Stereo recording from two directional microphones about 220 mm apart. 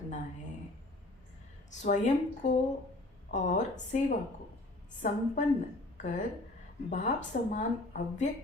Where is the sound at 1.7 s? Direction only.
35° left (ahead or behind).